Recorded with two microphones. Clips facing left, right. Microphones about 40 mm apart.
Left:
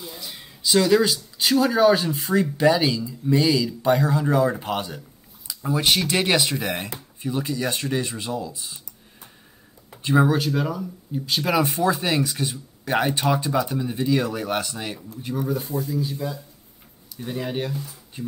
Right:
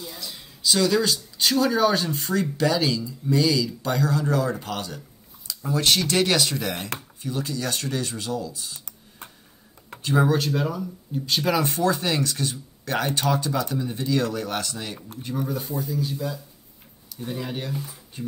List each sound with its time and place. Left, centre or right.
0.0 s speech: centre
10.0 s speech: centre
15.2 s speech: centre
17.2 s speech: centre